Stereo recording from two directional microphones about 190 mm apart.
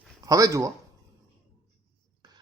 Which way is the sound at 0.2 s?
20° right (ahead or behind).